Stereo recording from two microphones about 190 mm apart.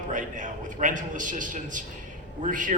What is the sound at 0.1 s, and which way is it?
A man's voice, 40° right (ahead or behind).